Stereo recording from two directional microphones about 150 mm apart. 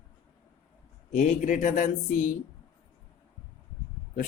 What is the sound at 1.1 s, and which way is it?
Speech, 60° left (ahead or behind).